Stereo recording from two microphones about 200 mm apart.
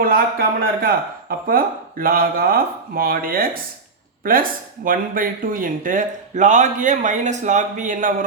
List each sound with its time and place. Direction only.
0.0 s a man's voice: 45° right (ahead or behind)